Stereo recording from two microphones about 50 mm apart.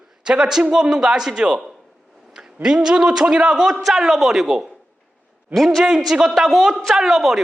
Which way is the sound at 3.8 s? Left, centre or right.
Centre.